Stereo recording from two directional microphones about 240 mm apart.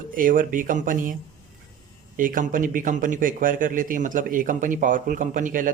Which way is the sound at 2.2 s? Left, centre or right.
Right.